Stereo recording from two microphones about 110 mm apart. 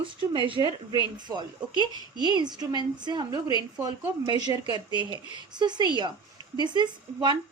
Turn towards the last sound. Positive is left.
turn(degrees=-40)  # may be behind; listen again after turning